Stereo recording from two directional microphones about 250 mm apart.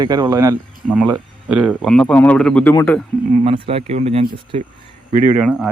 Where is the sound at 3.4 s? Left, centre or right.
Right.